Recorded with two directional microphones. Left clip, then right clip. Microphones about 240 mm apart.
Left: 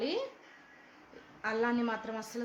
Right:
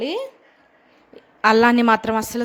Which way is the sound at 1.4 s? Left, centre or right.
Right.